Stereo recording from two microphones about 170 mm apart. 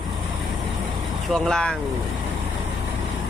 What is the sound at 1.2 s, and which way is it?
Speech, centre (ahead or behind).